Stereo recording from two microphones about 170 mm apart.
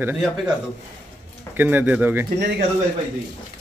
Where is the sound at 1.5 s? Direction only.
10° right (ahead or behind).